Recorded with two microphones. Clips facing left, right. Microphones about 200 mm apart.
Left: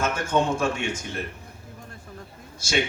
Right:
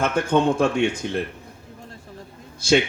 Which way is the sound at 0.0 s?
60° right (ahead or behind).